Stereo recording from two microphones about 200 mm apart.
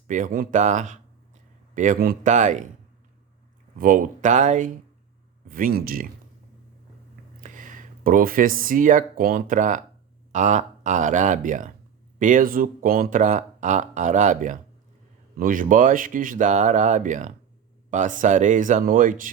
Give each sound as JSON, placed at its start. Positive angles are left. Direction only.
{"t": 0.1, "sound": "speech", "side_deg": -45}
{"t": 3.8, "sound": "speech", "side_deg": -40}
{"t": 7.4, "sound": "speech", "side_deg": -40}